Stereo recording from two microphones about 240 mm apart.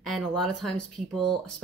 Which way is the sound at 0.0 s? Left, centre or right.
Centre.